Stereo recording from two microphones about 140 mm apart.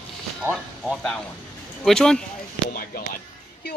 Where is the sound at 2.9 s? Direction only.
90° left.